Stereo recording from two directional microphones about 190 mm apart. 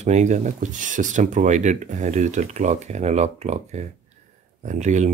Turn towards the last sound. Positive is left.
turn(degrees=-40)  # may be behind; listen again after turning